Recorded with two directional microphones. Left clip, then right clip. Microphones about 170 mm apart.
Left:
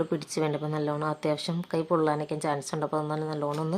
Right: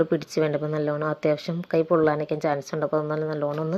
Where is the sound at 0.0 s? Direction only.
10° right (ahead or behind).